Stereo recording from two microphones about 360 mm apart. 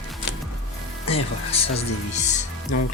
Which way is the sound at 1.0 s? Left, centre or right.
Centre.